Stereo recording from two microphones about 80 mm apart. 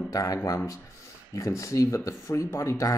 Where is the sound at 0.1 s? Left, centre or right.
Left.